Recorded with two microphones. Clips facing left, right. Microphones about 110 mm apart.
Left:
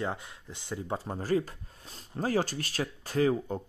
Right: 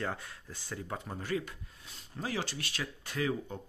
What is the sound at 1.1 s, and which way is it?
Speech, 35° left (ahead or behind).